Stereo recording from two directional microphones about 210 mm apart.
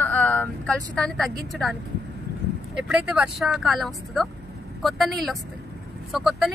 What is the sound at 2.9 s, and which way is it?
Speech, 5° right (ahead or behind).